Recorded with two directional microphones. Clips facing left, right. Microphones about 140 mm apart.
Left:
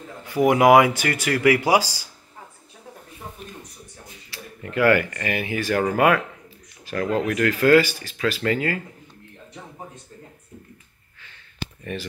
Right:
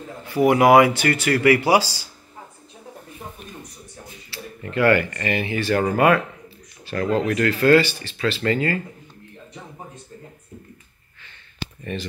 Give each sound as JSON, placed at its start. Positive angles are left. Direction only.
{"t": 0.4, "sound": "speech", "side_deg": 15}
{"t": 4.3, "sound": "speech", "side_deg": 10}
{"t": 11.8, "sound": "speech", "side_deg": 5}